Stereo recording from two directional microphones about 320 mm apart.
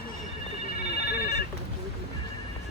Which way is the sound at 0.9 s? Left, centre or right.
Left.